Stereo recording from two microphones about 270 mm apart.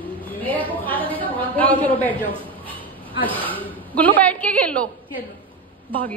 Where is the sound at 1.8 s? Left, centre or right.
Centre.